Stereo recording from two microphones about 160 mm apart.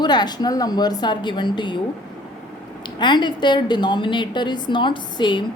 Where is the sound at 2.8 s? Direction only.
30° left (ahead or behind).